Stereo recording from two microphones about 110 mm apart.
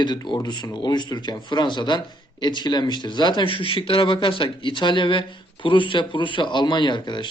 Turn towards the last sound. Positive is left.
turn(degrees=45)  # may be behind; listen again after turning